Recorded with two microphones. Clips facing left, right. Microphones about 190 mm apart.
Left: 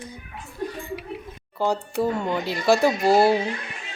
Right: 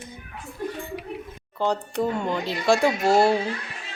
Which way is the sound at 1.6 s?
5° left (ahead or behind).